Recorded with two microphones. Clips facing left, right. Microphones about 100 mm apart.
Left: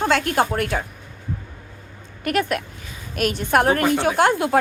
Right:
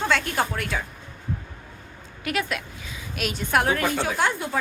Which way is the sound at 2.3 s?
50° left (ahead or behind).